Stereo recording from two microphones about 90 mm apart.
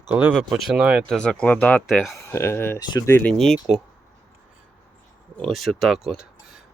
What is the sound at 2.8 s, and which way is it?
Speech, 50° left (ahead or behind).